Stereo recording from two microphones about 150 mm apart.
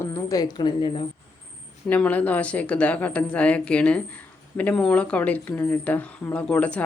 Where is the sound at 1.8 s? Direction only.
10° left (ahead or behind).